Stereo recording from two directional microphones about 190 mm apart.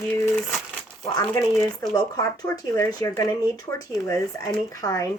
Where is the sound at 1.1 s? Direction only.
20° left (ahead or behind).